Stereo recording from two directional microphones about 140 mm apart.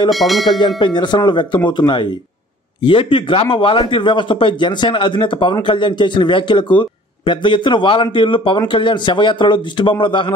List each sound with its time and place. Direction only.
0.1 s speech: centre (ahead or behind)
0.6 s a man's voice: 35° left (ahead or behind)